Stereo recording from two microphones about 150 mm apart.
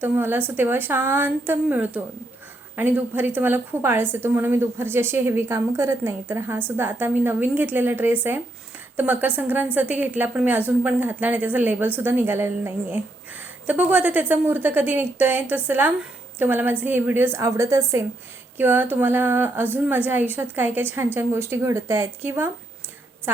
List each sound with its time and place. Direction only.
0.0 s a woman's voice: 15° right (ahead or behind)